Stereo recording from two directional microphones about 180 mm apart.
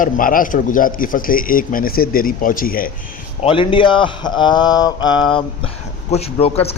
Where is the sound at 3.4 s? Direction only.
30° left (ahead or behind).